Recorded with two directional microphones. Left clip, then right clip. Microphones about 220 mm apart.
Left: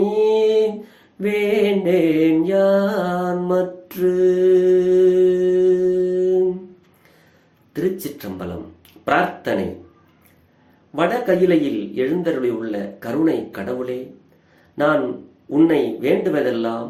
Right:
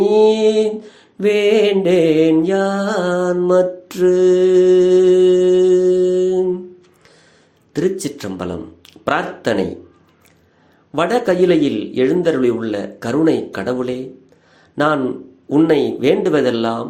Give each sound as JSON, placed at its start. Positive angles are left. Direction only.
{"t": 0.1, "sound": "mantra", "side_deg": -35}
{"t": 7.7, "sound": "a man's voice", "side_deg": -35}
{"t": 10.9, "sound": "a man's voice", "side_deg": -40}
{"t": 15.4, "sound": "a man's voice", "side_deg": -40}